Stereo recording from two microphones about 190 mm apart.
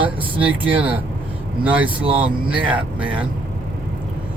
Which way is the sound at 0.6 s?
10° right (ahead or behind).